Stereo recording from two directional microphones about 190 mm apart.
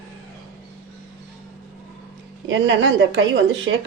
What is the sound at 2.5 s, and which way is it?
Speech, 75° right (ahead or behind).